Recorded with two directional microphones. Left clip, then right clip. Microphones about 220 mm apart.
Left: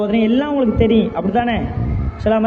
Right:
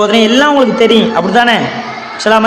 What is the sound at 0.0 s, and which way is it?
A man's voice, 20° right (ahead or behind).